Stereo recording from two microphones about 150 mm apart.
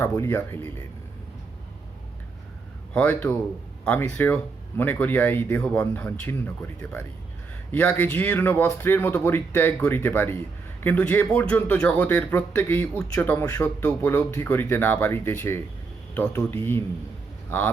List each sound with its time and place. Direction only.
0.0 s speech: 15° left (ahead or behind)
2.9 s speech: 10° left (ahead or behind)